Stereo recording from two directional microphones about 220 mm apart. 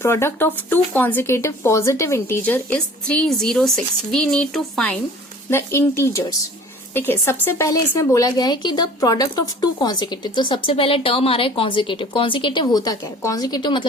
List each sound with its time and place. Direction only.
0.0 s speech: 10° left (ahead or behind)